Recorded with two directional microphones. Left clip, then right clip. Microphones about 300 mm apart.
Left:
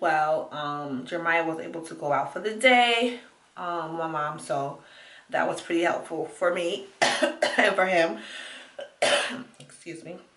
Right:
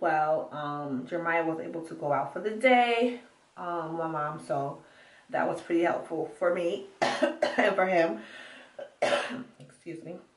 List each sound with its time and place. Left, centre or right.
0.0 s speech: centre
0.3 s a sound: centre
0.7 s speech: centre